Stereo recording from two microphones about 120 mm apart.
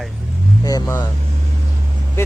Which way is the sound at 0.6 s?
30° left (ahead or behind).